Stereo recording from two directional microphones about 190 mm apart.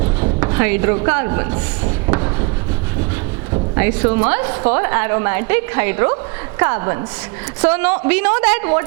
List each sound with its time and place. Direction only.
0.3 s a woman's voice: 20° right (ahead or behind)
2.0 s a sound: 25° right (ahead or behind)
3.8 s a woman's voice: 15° right (ahead or behind)